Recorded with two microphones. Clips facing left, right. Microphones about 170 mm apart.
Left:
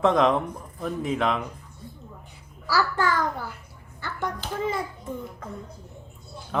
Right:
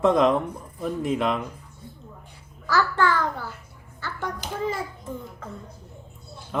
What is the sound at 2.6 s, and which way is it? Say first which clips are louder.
Speech: right 2 dB; 10° left (ahead or behind).